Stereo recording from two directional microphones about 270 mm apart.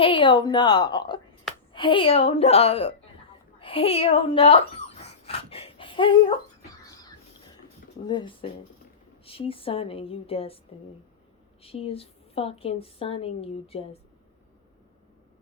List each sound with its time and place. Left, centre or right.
0.0 s a woman's voice: centre
3.6 s a sound: centre
8.0 s a woman's voice: centre
11.6 s a woman's voice: left